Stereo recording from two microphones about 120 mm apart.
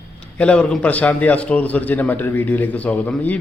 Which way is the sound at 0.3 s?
10° left (ahead or behind).